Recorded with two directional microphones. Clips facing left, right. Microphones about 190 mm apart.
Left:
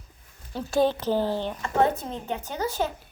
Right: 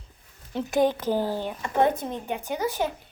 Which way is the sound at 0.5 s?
20° right (ahead or behind).